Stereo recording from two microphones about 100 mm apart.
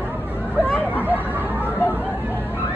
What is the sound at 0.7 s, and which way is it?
Hubbub, 20° left (ahead or behind).